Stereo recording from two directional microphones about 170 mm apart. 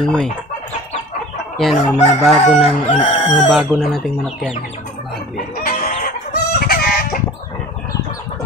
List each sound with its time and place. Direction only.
0.0 s speech: 5° left (ahead or behind)
1.6 s speech: centre (ahead or behind)
2.9 s speech: 40° left (ahead or behind)
3.3 s speech: centre (ahead or behind)
5.6 s chicken: 55° left (ahead or behind)